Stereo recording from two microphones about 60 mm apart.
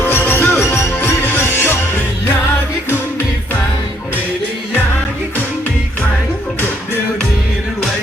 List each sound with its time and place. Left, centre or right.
0.1 s music: left
0.6 s music: left